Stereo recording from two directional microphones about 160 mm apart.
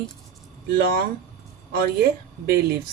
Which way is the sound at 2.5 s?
75° right (ahead or behind).